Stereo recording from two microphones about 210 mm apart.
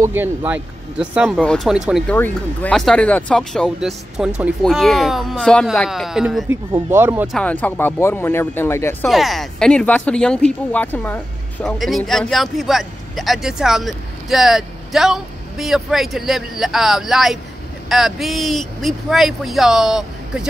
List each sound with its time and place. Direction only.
0.0 s speech: 10° right (ahead or behind)
7.3 s speech: 5° left (ahead or behind)
9.0 s speech: centre (ahead or behind)